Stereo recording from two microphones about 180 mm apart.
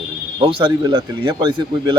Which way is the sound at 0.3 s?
30° right (ahead or behind).